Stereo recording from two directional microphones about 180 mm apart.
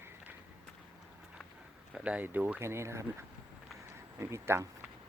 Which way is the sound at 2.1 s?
10° right (ahead or behind).